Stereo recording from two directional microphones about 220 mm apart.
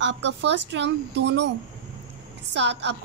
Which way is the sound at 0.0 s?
55° right (ahead or behind).